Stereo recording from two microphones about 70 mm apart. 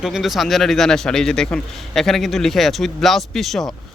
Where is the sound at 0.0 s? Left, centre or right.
Centre.